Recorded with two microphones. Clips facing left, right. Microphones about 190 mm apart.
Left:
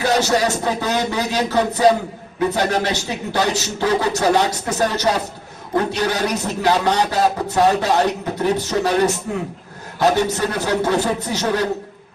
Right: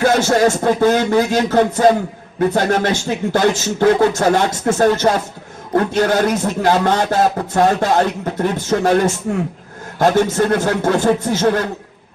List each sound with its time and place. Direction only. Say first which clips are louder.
0.0 s a man's voice: right 4 dB; 50° right (ahead or behind)